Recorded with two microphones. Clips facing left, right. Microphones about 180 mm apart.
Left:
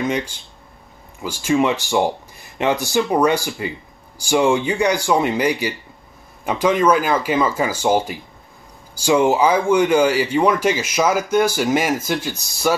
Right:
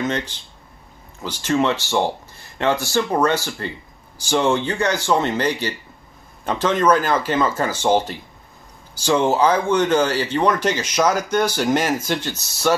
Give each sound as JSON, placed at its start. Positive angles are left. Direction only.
{"t": 0.0, "sound": "speech", "side_deg": 10}